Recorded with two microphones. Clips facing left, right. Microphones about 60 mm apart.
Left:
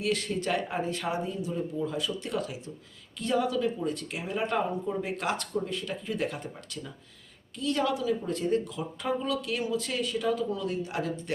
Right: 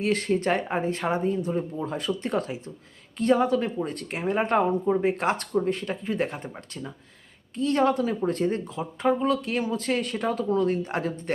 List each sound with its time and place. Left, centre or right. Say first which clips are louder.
0.0 s speech: right 5 dB; right